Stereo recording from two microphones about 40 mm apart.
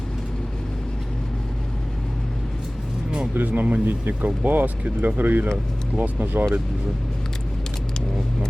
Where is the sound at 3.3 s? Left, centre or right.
Right.